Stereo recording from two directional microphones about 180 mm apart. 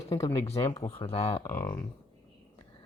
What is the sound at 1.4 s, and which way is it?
Speech, 15° left (ahead or behind).